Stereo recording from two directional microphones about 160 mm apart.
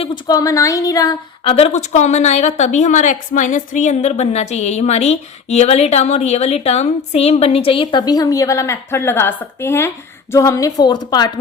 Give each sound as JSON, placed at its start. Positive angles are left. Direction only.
{"t": 0.0, "sound": "speech", "side_deg": 25}
{"t": 1.5, "sound": "a woman's voice", "side_deg": 40}